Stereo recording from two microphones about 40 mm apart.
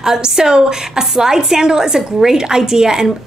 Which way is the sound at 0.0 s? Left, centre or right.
Centre.